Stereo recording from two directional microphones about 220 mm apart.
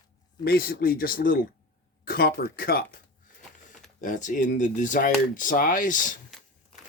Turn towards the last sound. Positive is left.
turn(degrees=35)  # may be behind; listen again after turning